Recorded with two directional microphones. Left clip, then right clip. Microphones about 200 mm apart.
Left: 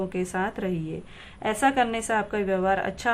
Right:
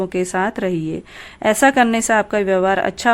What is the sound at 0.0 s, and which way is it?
A woman's voice, 40° right (ahead or behind).